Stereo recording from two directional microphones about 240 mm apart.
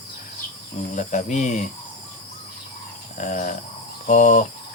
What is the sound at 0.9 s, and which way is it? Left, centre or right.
Speech, left.